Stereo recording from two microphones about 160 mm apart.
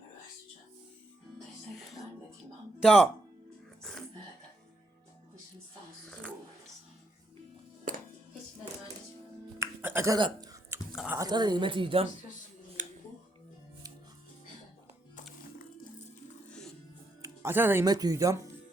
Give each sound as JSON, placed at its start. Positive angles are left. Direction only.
{"t": 1.7, "sound": "music", "side_deg": 0}
{"t": 2.8, "sound": "speech", "side_deg": 0}
{"t": 7.9, "sound": "music", "side_deg": -55}
{"t": 9.6, "sound": "music", "side_deg": -15}
{"t": 10.2, "sound": "a sound", "side_deg": -25}
{"t": 10.9, "sound": "a sound", "side_deg": -5}
{"t": 11.2, "sound": "speech", "side_deg": -25}
{"t": 12.8, "sound": "a sound", "side_deg": -50}
{"t": 16.5, "sound": "music", "side_deg": 5}
{"t": 17.2, "sound": "music", "side_deg": -15}
{"t": 17.8, "sound": "speech", "side_deg": -25}